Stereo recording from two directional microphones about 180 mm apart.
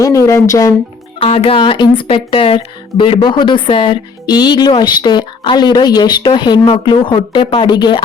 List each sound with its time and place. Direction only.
0.0 s speech: 20° left (ahead or behind)
1.2 s speech: 30° left (ahead or behind)